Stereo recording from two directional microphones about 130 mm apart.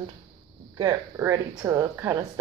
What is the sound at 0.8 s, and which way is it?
Speech, 25° right (ahead or behind).